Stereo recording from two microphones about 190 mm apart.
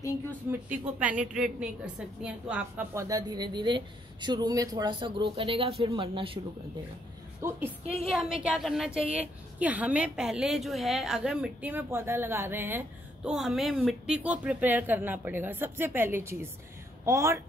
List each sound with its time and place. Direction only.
0.5 s a woman's voice: 10° right (ahead or behind); by 6.4 s 25° right (ahead or behind)
7.4 s a woman's voice: 10° right (ahead or behind)
8.0 s a sound: 5° right (ahead or behind)
9.6 s a woman's voice: 5° right (ahead or behind)